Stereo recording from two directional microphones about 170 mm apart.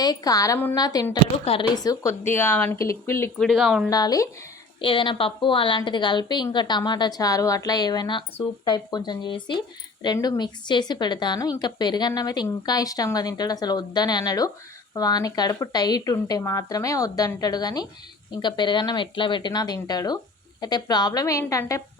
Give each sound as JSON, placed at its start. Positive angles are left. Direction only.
{"t": 0.0, "sound": "a woman's voice", "side_deg": 20}
{"t": 3.3, "sound": "speech", "side_deg": 0}
{"t": 3.8, "sound": "a woman's voice", "side_deg": 20}